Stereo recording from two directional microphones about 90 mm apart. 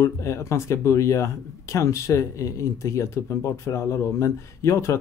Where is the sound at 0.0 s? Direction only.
30° left (ahead or behind).